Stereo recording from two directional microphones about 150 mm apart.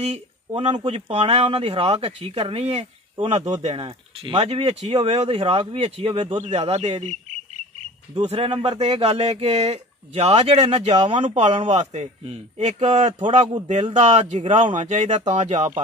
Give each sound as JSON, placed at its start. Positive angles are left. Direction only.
{"t": 0.5, "sound": "a man's voice", "side_deg": -35}
{"t": 8.3, "sound": "a man's voice", "side_deg": -40}